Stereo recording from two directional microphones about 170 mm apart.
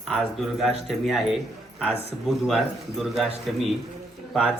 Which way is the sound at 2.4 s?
Centre (ahead or behind).